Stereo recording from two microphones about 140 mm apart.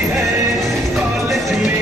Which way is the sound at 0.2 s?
Centre (ahead or behind).